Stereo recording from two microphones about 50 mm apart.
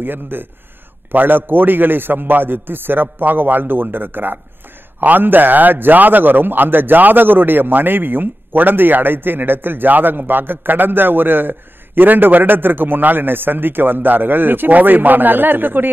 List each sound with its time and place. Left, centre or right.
0.0 s a man's voice: right